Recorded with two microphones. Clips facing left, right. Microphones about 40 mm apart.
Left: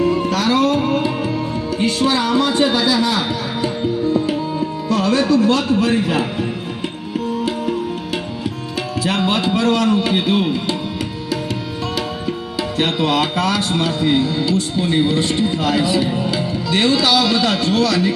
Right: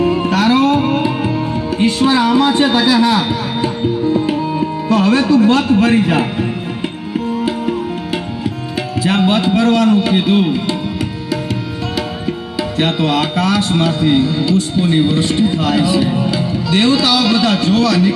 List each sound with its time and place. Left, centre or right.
0.0 s music: right
1.8 s speech: right
4.9 s speech: right
9.0 s speech: centre
12.8 s speech: centre